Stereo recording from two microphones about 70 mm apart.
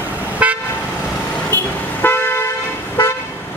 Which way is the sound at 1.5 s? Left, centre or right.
Left.